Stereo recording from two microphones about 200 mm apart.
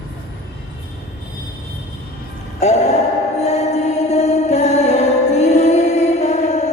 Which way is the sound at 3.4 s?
35° left (ahead or behind).